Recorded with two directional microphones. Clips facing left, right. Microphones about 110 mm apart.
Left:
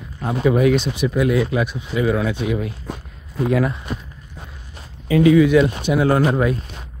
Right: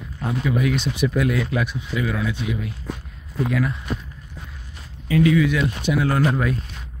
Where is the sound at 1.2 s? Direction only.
15° left (ahead or behind).